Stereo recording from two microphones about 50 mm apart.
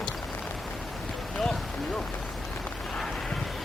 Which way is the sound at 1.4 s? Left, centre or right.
Centre.